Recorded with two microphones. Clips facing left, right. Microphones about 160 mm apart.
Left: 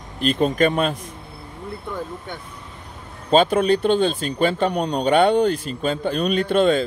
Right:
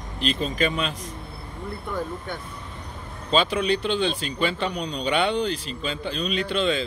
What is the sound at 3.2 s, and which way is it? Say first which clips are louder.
Speech: left 6 dB; 50° left (ahead or behind).